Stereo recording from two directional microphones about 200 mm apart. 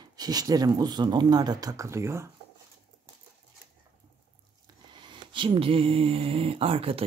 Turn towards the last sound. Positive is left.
turn(degrees=-30)  # may be behind; listen again after turning